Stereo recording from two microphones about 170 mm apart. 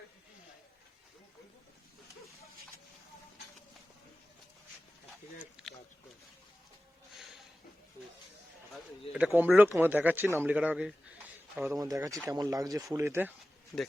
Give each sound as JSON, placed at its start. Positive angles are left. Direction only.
{"t": 5.6, "sound": "a sound", "side_deg": -5}
{"t": 9.1, "sound": "speech", "side_deg": -10}
{"t": 11.7, "sound": "speech", "side_deg": -20}
{"t": 13.7, "sound": "speech", "side_deg": 5}